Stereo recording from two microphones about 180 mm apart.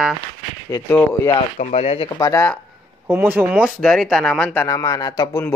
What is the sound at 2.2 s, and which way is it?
Speech, 15° left (ahead or behind).